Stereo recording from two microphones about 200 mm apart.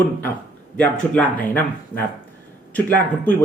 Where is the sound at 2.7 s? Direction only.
10° left (ahead or behind).